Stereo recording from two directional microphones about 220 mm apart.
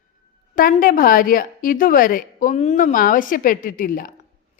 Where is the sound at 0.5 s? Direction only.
40° left (ahead or behind).